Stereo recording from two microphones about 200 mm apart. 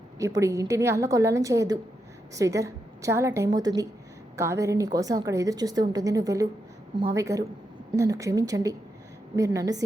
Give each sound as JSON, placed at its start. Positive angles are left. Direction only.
{"t": 0.2, "sound": "a woman's voice", "side_deg": -15}